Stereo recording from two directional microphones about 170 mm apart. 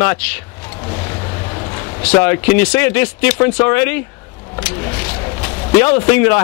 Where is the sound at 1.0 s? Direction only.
25° left (ahead or behind).